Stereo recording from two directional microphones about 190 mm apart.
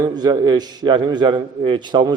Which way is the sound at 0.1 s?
20° right (ahead or behind).